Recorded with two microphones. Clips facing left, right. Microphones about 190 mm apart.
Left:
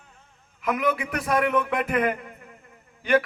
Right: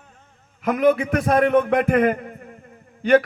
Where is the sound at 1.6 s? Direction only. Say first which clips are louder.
Right 7 dB; 40° right (ahead or behind).